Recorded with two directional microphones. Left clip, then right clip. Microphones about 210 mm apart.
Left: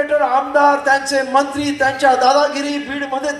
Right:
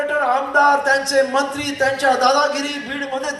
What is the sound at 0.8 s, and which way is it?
A man's voice, 45° right (ahead or behind).